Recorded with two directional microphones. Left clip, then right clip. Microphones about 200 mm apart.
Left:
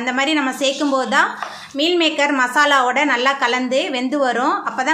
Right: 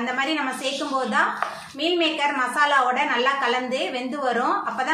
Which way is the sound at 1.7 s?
45° left (ahead or behind).